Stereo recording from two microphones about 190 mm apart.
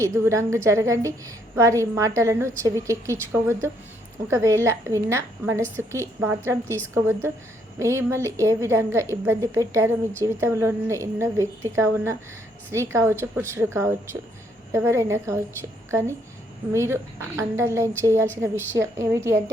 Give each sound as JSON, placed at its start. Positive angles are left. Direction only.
{"t": 0.0, "sound": "a woman's voice", "side_deg": -15}